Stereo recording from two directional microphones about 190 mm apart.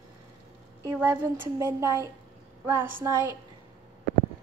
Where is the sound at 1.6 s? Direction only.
15° right (ahead or behind).